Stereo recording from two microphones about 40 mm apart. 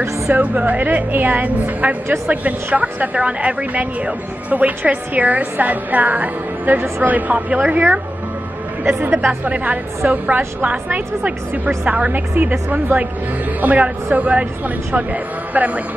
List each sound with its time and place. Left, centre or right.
0.3 s speech: right
9.4 s speech: right
10.3 s speech: right
12.1 s a woman's voice: right
13.6 s speech: right
15.5 s speech: right